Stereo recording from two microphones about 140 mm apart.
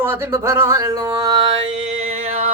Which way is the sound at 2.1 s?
45° right (ahead or behind).